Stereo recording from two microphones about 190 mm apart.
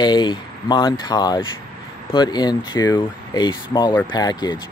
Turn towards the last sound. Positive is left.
turn(degrees=20)  # may be behind; listen again after turning